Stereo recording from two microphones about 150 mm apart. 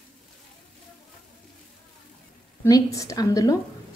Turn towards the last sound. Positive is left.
turn(degrees=25)  # may be behind; listen again after turning